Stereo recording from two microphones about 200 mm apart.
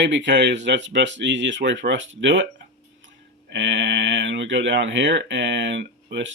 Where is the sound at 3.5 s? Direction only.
65° right (ahead or behind).